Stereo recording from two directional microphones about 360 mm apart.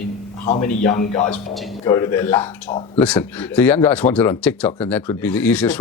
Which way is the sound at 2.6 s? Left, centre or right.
Centre.